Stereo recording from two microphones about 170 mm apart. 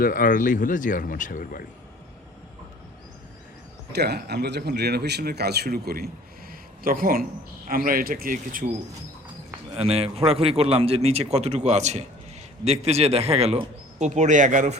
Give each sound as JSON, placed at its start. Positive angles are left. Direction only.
{"t": 0.0, "sound": "speech", "side_deg": 55}
{"t": 3.9, "sound": "speech", "side_deg": -75}
{"t": 6.5, "sound": "a sound", "side_deg": -60}
{"t": 7.7, "sound": "speech", "side_deg": -55}
{"t": 9.7, "sound": "a man's voice", "side_deg": -35}